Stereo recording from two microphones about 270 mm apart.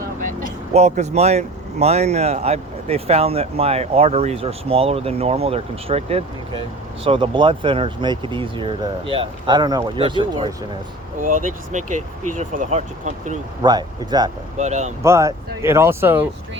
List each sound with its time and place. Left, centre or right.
0.7 s speech: right
11.2 s speech: right
13.6 s speech: centre
14.6 s speech: right
15.0 s speech: centre